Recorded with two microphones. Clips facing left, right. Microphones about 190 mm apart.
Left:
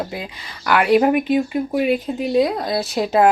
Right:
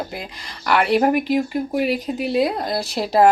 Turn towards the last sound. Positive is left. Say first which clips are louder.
# left 1 dB
turn(degrees=0)  # may be behind; listen again after turning